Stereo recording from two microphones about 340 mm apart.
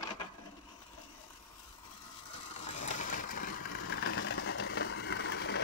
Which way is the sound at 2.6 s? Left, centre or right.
Left.